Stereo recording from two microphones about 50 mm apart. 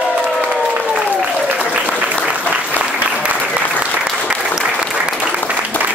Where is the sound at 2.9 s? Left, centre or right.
Right.